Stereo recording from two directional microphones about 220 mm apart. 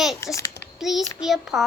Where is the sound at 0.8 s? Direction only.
Centre (ahead or behind).